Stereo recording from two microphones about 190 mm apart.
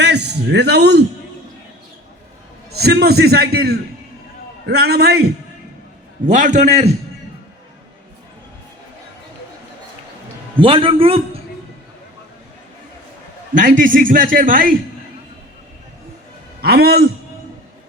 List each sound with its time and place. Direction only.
0.0 s a man's voice: 65° right (ahead or behind)
2.7 s a man's voice: 55° right (ahead or behind)
6.2 s a man's voice: 40° right (ahead or behind)
10.6 s a man's voice: 30° right (ahead or behind)
13.5 s a man's voice: 45° right (ahead or behind)
16.6 s a man's voice: 55° right (ahead or behind)